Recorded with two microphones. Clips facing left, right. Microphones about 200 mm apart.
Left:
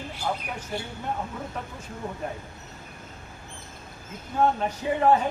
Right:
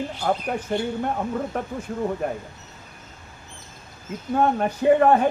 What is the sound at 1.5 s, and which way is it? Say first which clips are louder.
Speech: right 9 dB; 55° right (ahead or behind).